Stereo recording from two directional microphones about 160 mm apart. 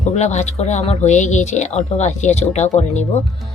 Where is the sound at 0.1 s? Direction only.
45° left (ahead or behind).